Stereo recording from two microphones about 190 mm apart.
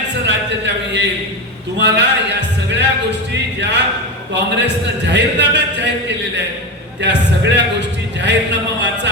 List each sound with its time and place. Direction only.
0.1 s a sound: 65° right (ahead or behind)
1.8 s music: 65° right (ahead or behind)
3.6 s a man's voice: 65° right (ahead or behind)
7.0 s a man's voice: 65° right (ahead or behind)